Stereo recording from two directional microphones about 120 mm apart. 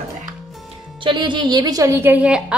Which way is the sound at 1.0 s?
40° right (ahead or behind).